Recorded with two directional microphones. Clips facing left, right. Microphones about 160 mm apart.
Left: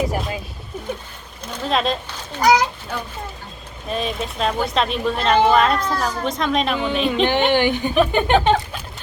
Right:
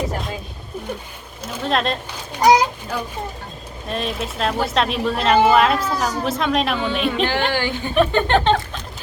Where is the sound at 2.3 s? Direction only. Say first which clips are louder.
Right 2 dB; 15° right (ahead or behind).